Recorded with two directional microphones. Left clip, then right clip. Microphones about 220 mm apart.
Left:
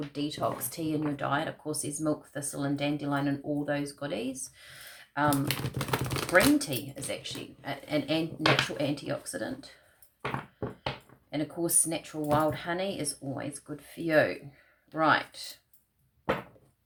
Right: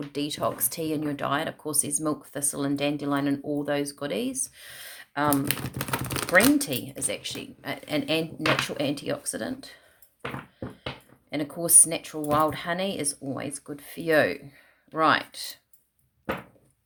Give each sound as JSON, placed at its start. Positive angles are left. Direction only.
{"t": 0.1, "sound": "speech", "side_deg": -50}
{"t": 5.3, "sound": "speech", "side_deg": -20}
{"t": 6.3, "sound": "speech", "side_deg": -50}
{"t": 11.3, "sound": "speech", "side_deg": -50}